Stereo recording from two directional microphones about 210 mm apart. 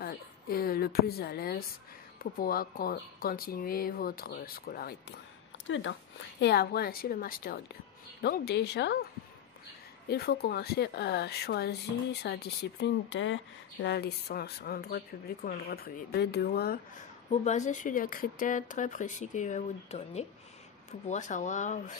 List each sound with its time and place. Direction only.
0.0 s a woman's voice: 45° left (ahead or behind)
5.7 s speech: 65° left (ahead or behind)
6.4 s speech: 50° left (ahead or behind)
10.0 s speech: 50° left (ahead or behind)
17.3 s speech: 35° left (ahead or behind)